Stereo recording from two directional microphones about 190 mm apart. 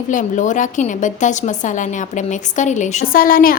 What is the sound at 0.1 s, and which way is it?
A woman's voice, 40° left (ahead or behind).